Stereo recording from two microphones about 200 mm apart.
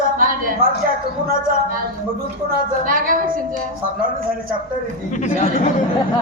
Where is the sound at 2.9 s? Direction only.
45° right (ahead or behind).